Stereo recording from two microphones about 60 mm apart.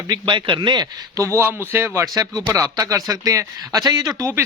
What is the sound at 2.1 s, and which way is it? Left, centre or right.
Speech, right.